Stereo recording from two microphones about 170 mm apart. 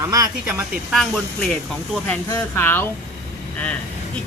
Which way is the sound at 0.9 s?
5° left (ahead or behind).